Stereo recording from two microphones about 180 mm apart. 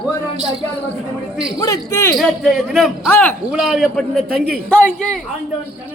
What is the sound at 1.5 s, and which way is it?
Speech, 20° left (ahead or behind).